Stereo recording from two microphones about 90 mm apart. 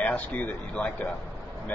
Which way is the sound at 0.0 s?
15° left (ahead or behind).